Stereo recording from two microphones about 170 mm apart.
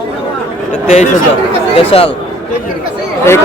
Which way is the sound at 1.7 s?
35° left (ahead or behind).